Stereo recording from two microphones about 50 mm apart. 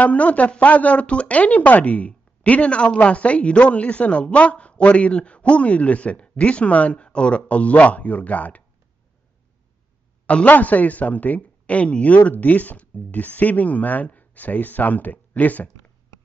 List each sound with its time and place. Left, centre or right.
0.0 s speech: left
10.2 s speech: left